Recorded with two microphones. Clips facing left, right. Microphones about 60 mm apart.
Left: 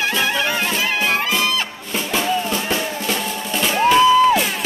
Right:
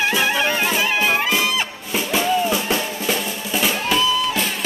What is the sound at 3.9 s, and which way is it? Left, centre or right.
Music, left.